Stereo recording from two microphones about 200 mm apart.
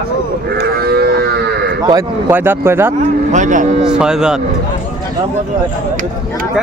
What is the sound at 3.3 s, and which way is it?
Speech, 40° right (ahead or behind).